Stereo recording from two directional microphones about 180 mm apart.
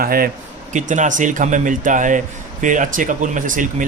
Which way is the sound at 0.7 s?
45° right (ahead or behind).